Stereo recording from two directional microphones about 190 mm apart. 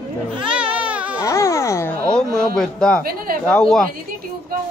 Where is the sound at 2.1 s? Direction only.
5° left (ahead or behind).